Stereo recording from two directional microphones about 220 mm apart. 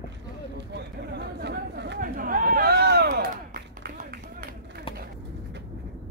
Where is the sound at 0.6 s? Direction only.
50° right (ahead or behind).